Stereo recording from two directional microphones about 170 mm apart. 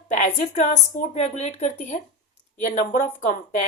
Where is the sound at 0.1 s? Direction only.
45° left (ahead or behind).